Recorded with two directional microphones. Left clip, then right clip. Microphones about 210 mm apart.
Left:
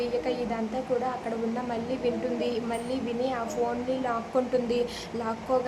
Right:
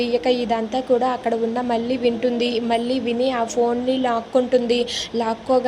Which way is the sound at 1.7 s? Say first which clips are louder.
Right 9 dB; 20° right (ahead or behind).